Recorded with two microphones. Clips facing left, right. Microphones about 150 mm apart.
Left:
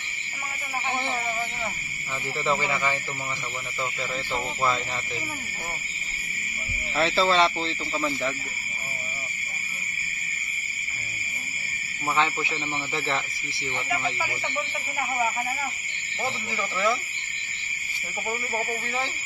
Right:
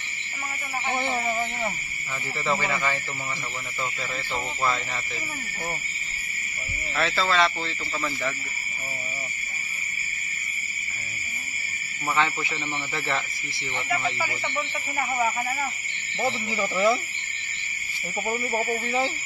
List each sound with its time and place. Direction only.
2.4 s speech: 15° left (ahead or behind)
7.0 s speech: 30° left (ahead or behind)
12.2 s speech: 20° left (ahead or behind)
13.8 s speech: 5° left (ahead or behind)
16.2 s speech: 20° right (ahead or behind)
18.3 s speech: 15° right (ahead or behind)